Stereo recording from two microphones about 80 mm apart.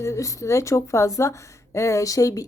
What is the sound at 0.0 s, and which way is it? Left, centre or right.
Speech, left.